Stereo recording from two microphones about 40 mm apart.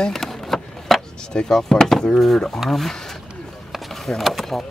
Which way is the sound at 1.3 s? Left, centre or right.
Centre.